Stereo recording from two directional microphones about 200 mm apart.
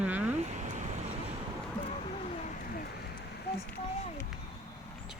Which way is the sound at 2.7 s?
50° left (ahead or behind).